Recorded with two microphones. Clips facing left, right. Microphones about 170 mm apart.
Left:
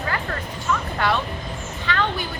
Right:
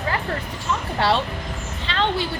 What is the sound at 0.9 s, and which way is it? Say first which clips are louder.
A woman's voice: right 2 dB; 30° right (ahead or behind).